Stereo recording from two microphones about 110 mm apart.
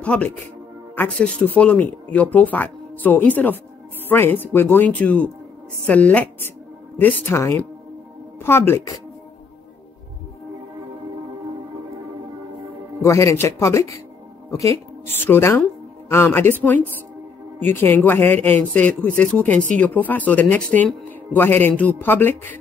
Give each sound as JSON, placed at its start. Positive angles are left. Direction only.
{"t": 0.0, "sound": "speech", "side_deg": 10}
{"t": 7.3, "sound": "a woman's voice", "side_deg": 25}
{"t": 13.0, "sound": "a woman's voice", "side_deg": 25}